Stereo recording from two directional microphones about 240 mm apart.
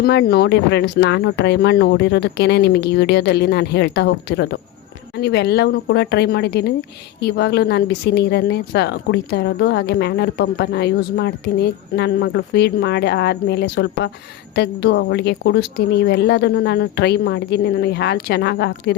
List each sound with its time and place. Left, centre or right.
0.0 s a woman's voice: left